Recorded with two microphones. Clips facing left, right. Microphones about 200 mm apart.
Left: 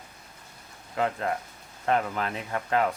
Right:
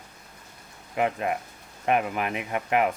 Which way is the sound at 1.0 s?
15° right (ahead or behind).